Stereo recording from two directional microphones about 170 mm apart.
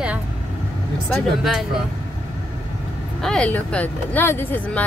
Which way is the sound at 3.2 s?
5° left (ahead or behind).